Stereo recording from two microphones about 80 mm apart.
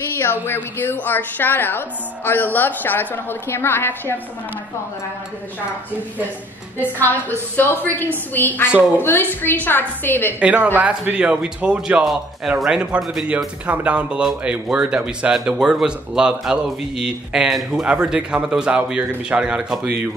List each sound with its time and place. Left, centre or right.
0.2 s a woman's voice: left
6.8 s a woman's voice: left
10.4 s speech: centre
12.1 s a man's voice: centre